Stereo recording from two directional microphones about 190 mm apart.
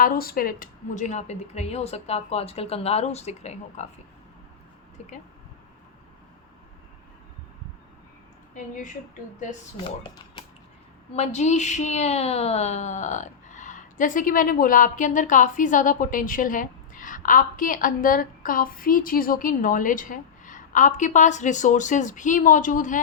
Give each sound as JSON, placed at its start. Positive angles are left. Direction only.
{"t": 0.0, "sound": "a woman's voice", "side_deg": 50}
{"t": 11.1, "sound": "speech", "side_deg": 35}